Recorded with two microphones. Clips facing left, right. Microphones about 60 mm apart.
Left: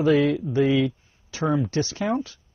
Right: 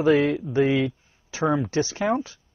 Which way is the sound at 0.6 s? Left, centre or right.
Right.